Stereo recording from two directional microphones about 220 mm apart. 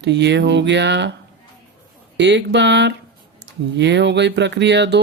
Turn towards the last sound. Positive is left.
turn(degrees=-50)  # may be behind; listen again after turning